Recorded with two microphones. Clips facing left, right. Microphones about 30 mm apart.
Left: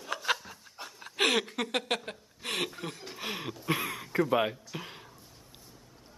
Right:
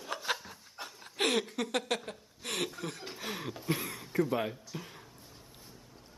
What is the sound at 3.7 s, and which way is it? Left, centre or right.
Throat clearing, left.